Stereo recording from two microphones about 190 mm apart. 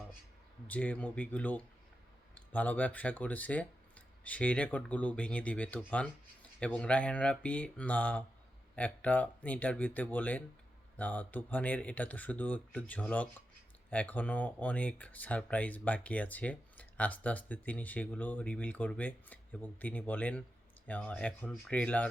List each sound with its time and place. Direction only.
0.7 s speech: 10° left (ahead or behind)